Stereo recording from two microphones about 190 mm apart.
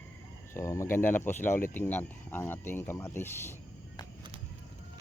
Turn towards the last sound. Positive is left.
turn(degrees=15)  # may be behind; listen again after turning